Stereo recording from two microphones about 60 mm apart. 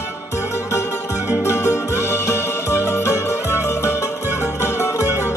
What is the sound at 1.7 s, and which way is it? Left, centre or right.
Music, left.